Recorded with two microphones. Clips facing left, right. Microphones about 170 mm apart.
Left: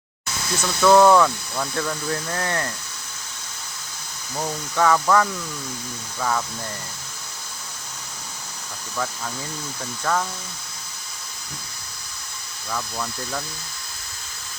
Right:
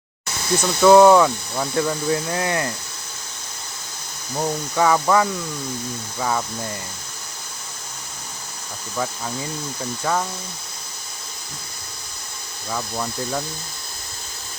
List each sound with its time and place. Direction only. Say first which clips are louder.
0.6 s speech: right 3 dB; 15° right (ahead or behind)
4.4 s speech: right 2 dB; 20° right (ahead or behind)
10.0 s speech: right 1 dB; 15° right (ahead or behind)
12.7 s speech: right 3 dB; 20° right (ahead or behind)